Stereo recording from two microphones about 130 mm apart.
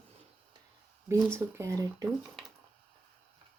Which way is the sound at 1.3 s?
20° right (ahead or behind).